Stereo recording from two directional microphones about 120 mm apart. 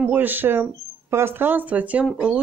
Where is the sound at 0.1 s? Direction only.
15° right (ahead or behind).